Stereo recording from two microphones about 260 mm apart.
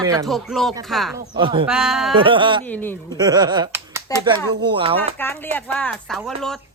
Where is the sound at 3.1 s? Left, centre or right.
Centre.